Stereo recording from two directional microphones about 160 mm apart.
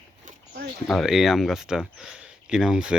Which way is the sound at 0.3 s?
65° right (ahead or behind).